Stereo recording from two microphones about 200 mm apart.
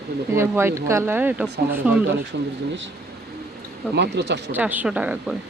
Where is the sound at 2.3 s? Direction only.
55° right (ahead or behind).